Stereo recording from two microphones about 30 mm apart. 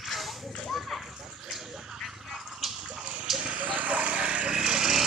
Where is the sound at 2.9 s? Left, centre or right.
Right.